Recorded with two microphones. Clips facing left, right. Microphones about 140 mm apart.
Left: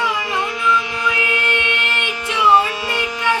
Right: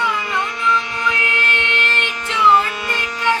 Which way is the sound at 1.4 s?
10° left (ahead or behind).